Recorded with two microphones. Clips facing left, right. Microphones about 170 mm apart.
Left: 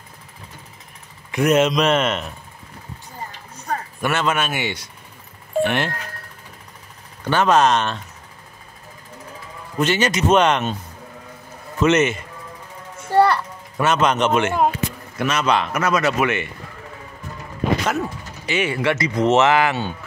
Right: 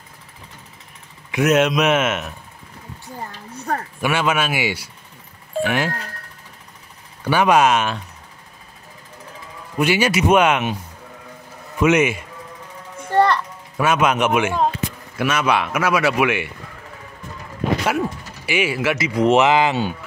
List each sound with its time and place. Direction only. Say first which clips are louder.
1.3 s a man's voice: even; 5° right (ahead or behind)
3.5 s a sound: right 2 dB; 60° right (ahead or behind)
4.0 s speech: right 1 dB; 10° right (ahead or behind)
7.2 s speech: right 1 dB; 10° right (ahead or behind)
9.8 s speech: right 1 dB; 10° right (ahead or behind)
11.8 s speech: right 1 dB; 10° right (ahead or behind)
13.1 s children playing: left 1 dB; 5° left (ahead or behind)
13.8 s speech: even; 10° right (ahead or behind)
17.8 s speech: right 2 dB; 10° right (ahead or behind)